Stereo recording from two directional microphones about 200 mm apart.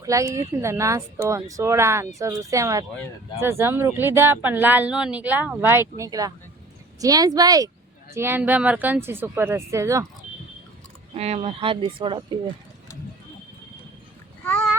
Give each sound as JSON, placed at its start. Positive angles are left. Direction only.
{"t": 0.0, "sound": "speech", "side_deg": -15}
{"t": 11.1, "sound": "speech", "side_deg": -30}
{"t": 14.4, "sound": "a sound", "side_deg": 10}